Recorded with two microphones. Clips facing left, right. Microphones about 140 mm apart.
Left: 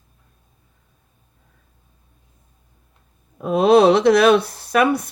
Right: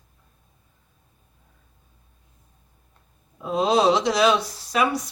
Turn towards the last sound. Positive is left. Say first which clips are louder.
# left 6 dB
turn(degrees=55)  # may be behind; listen again after turning